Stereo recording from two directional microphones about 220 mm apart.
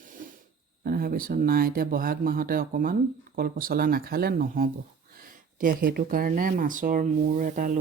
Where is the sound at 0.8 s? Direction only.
40° right (ahead or behind).